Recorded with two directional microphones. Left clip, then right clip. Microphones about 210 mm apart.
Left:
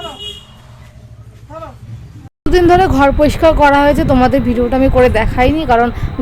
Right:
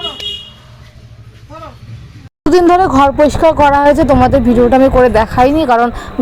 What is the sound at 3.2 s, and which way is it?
Speech, 15° right (ahead or behind).